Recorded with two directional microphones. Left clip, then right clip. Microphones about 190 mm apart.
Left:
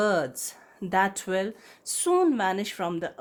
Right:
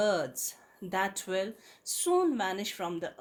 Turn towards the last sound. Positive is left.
turn(degrees=45)  # may be behind; listen again after turning